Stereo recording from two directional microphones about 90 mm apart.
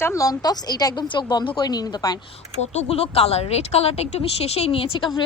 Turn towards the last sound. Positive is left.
turn(degrees=65)  # may be behind; listen again after turning